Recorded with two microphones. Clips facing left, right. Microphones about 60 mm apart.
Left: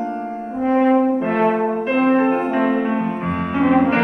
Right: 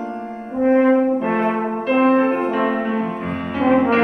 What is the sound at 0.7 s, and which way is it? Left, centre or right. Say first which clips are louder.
French horn: right 1 dB; right.